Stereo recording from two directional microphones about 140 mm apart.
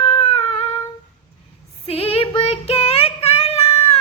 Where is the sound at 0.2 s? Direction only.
40° left (ahead or behind).